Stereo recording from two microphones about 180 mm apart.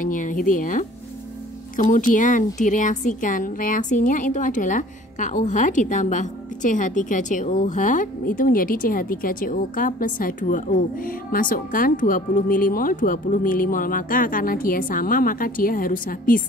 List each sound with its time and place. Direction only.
0.0 s a woman's voice: 45° left (ahead or behind)